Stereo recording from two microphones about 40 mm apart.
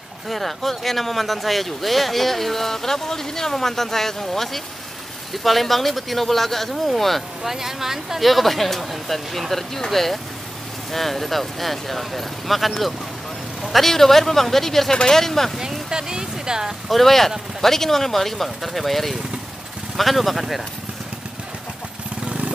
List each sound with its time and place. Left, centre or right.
0.3 s speech: centre
7.4 s speech: centre
15.6 s speech: centre
16.9 s speech: centre